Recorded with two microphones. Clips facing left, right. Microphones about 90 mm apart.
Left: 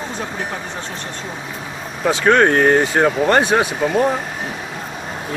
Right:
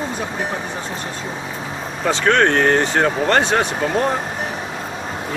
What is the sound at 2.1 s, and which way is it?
Speech, 10° left (ahead or behind).